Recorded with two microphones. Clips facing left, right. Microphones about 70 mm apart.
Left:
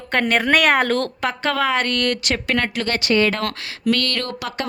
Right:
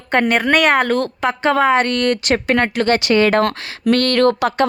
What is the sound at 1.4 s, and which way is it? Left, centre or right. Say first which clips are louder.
Speech: right 6 dB; right.